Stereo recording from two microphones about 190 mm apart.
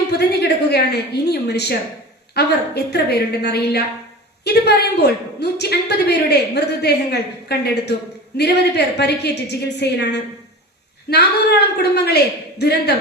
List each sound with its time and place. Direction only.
0.2 s a woman's voice: 60° left (ahead or behind)